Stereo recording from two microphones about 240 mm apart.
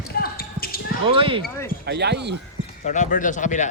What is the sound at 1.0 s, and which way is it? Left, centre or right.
Speech, right.